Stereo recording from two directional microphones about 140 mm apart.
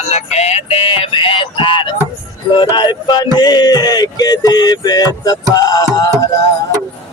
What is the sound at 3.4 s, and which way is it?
Mantra, 30° left (ahead or behind).